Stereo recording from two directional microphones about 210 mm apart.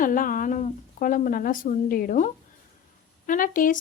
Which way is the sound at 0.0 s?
40° left (ahead or behind).